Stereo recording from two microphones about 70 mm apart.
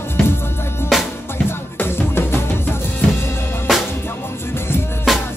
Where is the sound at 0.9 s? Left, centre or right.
Centre.